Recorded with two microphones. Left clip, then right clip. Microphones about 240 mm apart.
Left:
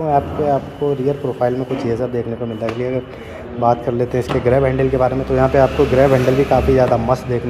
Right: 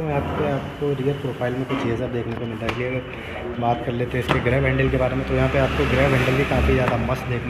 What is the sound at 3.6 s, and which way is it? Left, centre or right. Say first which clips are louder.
Speech: left 8 dB; left.